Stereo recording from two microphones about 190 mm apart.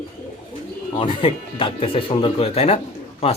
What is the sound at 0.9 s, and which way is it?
Speech, 30° left (ahead or behind).